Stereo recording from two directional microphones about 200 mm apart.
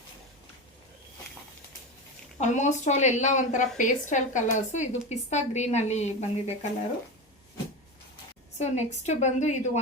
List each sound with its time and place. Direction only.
2.4 s speech: 35° left (ahead or behind)
8.5 s speech: 35° left (ahead or behind)